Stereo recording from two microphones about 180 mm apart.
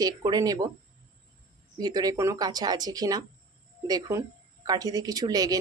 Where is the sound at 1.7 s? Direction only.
20° right (ahead or behind).